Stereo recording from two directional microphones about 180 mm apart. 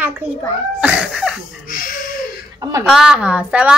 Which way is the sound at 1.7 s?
50° left (ahead or behind).